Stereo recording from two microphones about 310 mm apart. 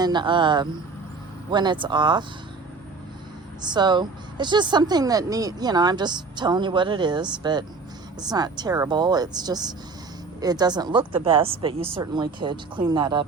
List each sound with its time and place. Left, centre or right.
0.0 s speech: centre
3.6 s speech: centre